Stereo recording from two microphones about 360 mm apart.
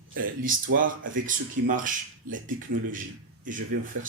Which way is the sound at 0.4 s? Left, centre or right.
Right.